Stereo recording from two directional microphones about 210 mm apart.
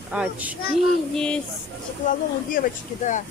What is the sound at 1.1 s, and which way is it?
Speech, 5° left (ahead or behind).